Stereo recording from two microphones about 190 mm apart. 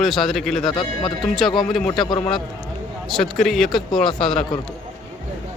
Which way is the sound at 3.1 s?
Centre (ahead or behind).